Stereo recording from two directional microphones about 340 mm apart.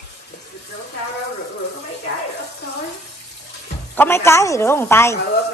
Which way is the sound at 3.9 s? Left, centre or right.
Centre.